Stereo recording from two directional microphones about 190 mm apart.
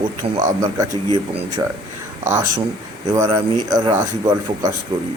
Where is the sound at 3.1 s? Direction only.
15° right (ahead or behind).